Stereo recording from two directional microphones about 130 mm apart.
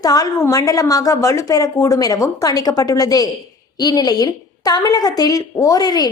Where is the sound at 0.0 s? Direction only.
30° left (ahead or behind).